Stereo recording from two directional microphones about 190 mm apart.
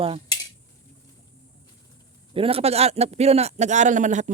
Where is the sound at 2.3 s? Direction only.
30° right (ahead or behind).